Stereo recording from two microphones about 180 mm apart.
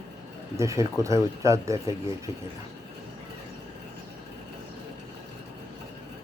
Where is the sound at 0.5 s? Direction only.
15° right (ahead or behind).